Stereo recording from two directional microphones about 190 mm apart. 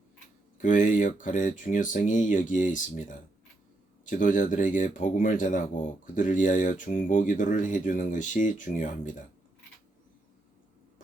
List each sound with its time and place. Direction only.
0.6 s speech: 45° left (ahead or behind)